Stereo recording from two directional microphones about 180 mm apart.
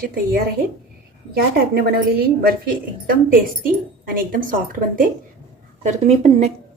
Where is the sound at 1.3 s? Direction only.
60° right (ahead or behind).